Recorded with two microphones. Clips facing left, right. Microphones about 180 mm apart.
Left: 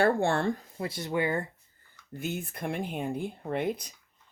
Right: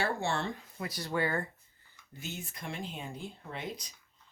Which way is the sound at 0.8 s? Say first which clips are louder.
Even; 25° left (ahead or behind).